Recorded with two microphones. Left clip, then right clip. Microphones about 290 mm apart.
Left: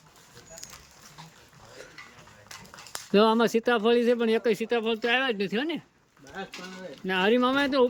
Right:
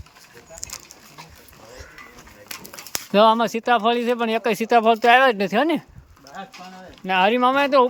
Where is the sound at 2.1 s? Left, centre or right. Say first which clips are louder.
Right 8 dB; right.